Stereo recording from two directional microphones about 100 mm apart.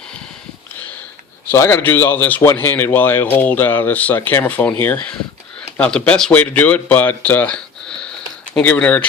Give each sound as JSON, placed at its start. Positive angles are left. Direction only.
{"t": 1.5, "sound": "speech", "side_deg": 25}